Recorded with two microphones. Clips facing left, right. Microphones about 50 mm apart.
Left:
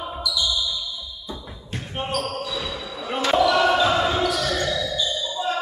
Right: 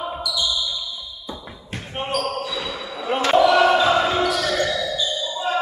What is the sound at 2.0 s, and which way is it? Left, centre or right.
Basketball bounce, centre.